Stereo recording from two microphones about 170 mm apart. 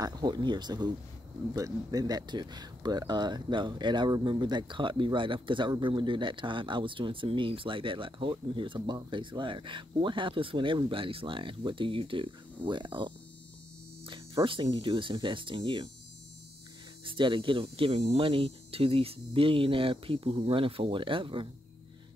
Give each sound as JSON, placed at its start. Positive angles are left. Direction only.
{"t": 0.0, "sound": "speech", "side_deg": -25}
{"t": 17.0, "sound": "speech", "side_deg": -30}